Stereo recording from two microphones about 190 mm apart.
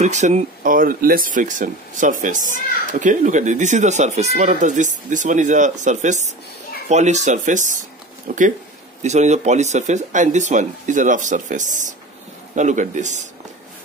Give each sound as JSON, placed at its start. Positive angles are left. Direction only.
{"t": 0.0, "sound": "speech", "side_deg": -35}